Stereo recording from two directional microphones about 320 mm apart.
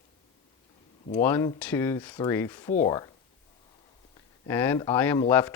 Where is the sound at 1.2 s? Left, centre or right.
Centre.